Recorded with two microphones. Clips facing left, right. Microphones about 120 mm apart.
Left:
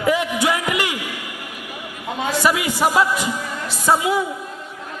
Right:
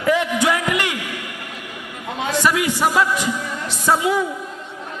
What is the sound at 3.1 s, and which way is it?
Music, 45° left (ahead or behind).